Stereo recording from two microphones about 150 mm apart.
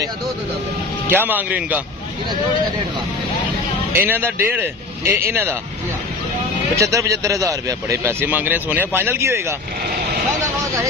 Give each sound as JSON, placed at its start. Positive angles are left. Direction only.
{"t": 1.0, "sound": "a man's voice", "side_deg": -15}
{"t": 3.9, "sound": "a man's voice", "side_deg": -15}
{"t": 6.8, "sound": "a man's voice", "side_deg": -20}